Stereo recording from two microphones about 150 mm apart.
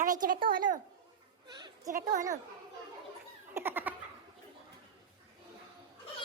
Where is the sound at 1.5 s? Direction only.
25° right (ahead or behind).